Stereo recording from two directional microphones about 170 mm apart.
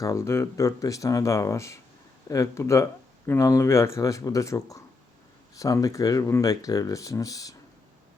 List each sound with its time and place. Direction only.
0.0 s speech: 20° left (ahead or behind)